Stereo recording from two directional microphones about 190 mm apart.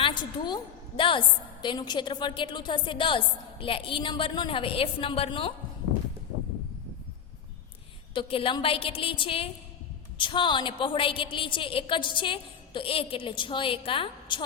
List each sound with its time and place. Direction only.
0.0 s a woman's voice: 25° left (ahead or behind)
8.1 s a woman's voice: 25° left (ahead or behind)